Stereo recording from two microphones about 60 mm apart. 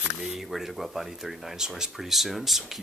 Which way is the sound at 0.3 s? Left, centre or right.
Centre.